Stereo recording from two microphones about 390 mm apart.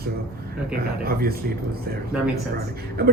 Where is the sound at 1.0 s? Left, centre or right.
Right.